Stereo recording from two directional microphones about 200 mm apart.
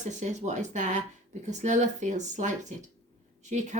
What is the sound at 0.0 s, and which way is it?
Speech, 35° right (ahead or behind).